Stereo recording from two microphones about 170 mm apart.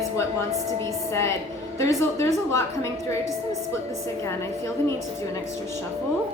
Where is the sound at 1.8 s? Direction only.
15° left (ahead or behind).